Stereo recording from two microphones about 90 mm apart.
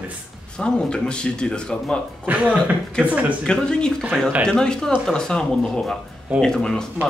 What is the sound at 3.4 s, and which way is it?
Speech, 10° left (ahead or behind).